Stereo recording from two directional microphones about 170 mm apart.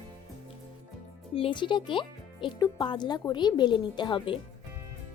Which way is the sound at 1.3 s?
30° left (ahead or behind).